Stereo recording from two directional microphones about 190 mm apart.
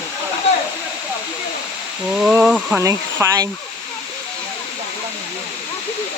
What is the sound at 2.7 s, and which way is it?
Speech, 15° right (ahead or behind).